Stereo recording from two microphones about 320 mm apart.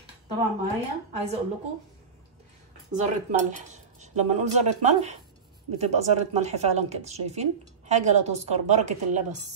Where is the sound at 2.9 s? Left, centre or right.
Right.